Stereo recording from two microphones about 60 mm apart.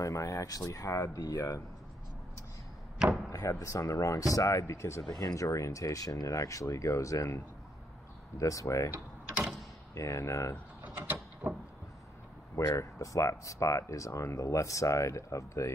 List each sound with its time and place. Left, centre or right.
0.0 s speech: left
3.3 s speech: left
5.2 s speech: left
8.4 s speech: left
9.9 s speech: left
12.5 s speech: left